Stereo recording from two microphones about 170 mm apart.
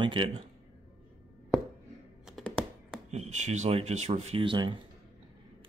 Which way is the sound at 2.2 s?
5° left (ahead or behind).